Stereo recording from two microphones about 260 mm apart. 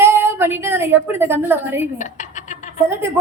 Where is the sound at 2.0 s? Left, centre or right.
Left.